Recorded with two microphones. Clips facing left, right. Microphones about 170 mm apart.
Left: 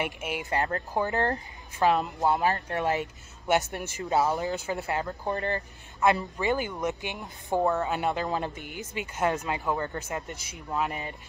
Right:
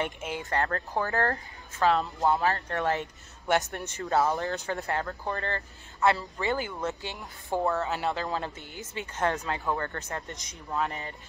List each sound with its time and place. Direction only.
0.0 s speech: 10° left (ahead or behind)
3.7 s speech: 15° left (ahead or behind)
4.5 s speech: centre (ahead or behind)